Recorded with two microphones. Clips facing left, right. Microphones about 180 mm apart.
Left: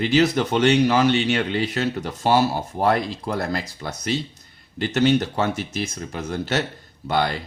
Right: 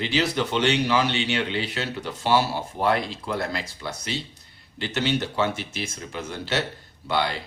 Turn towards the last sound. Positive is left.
turn(degrees=45)  # may be behind; listen again after turning